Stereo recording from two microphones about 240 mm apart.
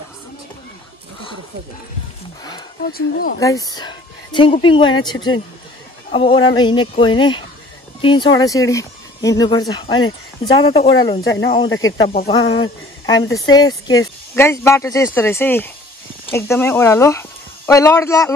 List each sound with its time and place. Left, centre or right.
2.9 s speech: left
3.3 s speech: centre
6.1 s speech: left